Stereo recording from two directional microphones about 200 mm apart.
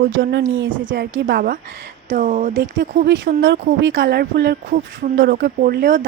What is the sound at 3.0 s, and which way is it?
Speech, 65° right (ahead or behind).